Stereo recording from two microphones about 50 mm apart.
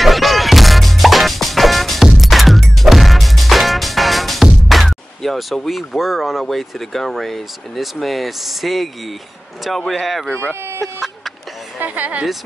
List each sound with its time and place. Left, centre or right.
0.0 s music: centre
4.6 s speech: centre
11.8 s speech: right